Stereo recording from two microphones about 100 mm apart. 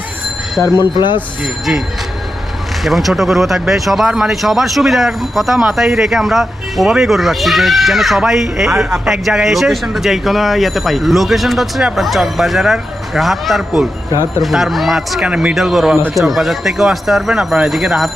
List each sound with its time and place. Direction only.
0.8 s speech: 50° left (ahead or behind)
2.8 s speech: centre (ahead or behind)